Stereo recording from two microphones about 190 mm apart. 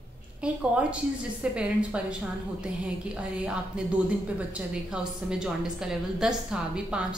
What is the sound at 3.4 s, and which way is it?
Speech, 5° right (ahead or behind).